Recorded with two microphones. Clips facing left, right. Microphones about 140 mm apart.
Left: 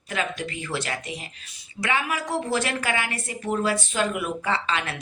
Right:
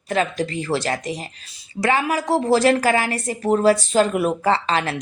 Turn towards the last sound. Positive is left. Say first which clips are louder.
# right 6 dB
turn(degrees=-35)  # may be behind; listen again after turning